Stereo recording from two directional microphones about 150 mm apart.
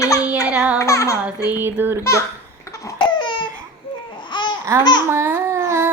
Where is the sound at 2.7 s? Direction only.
25° left (ahead or behind).